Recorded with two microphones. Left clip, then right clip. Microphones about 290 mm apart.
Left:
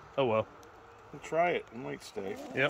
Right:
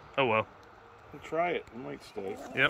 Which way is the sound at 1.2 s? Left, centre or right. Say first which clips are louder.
Left 1 dB; left.